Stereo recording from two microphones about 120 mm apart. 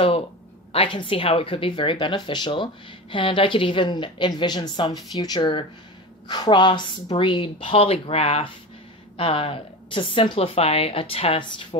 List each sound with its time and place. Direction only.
0.7 s speech: 45° left (ahead or behind)